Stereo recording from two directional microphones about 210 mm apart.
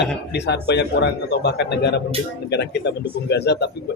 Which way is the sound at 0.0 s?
55° left (ahead or behind).